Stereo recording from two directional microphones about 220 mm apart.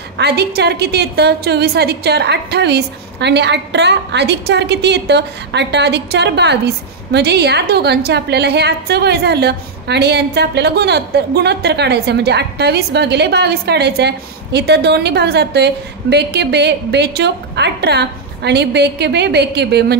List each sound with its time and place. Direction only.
0.2 s a woman's voice: 45° right (ahead or behind)